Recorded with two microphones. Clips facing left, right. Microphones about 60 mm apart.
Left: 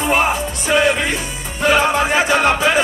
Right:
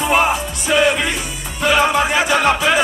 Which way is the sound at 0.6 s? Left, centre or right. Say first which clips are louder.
Even; left.